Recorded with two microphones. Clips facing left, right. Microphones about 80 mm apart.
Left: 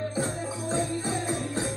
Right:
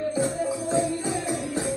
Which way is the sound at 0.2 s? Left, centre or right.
Left.